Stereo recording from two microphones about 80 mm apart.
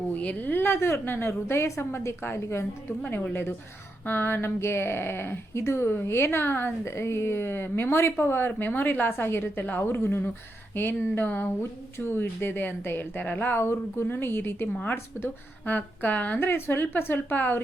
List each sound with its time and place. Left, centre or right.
0.1 s a woman's voice: centre
4.0 s speech: left
14.7 s a woman's voice: centre